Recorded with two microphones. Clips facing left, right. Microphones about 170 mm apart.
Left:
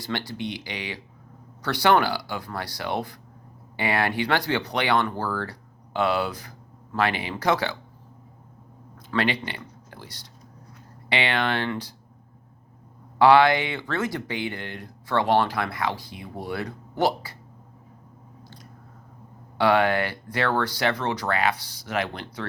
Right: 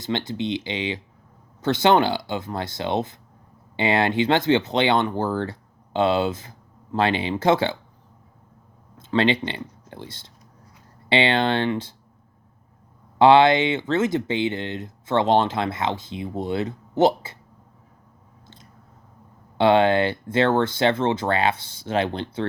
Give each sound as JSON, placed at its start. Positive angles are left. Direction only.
{"t": 0.0, "sound": "speech", "side_deg": -20}
{"t": 9.0, "sound": "speech", "side_deg": -25}
{"t": 13.1, "sound": "speech", "side_deg": -25}
{"t": 19.5, "sound": "speech", "side_deg": -25}